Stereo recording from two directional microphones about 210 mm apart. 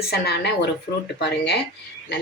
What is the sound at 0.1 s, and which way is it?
Speech, 50° left (ahead or behind).